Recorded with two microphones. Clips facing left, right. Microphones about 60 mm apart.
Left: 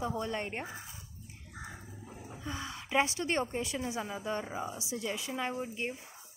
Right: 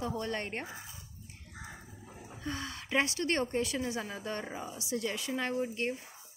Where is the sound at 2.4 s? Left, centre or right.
Centre.